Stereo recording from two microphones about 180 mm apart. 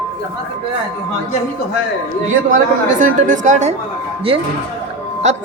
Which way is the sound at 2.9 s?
45° right (ahead or behind).